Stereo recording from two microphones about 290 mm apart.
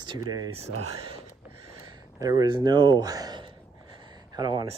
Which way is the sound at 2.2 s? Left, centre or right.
Centre.